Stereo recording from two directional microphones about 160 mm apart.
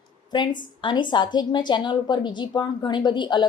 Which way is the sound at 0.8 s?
30° left (ahead or behind).